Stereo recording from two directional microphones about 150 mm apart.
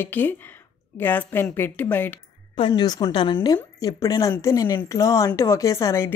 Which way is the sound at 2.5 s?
30° left (ahead or behind).